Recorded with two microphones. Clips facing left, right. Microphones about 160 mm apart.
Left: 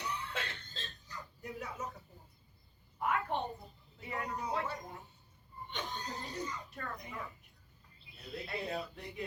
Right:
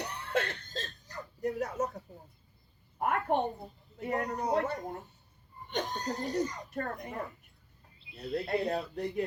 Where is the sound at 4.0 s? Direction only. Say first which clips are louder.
Right 7 dB; 45° right (ahead or behind).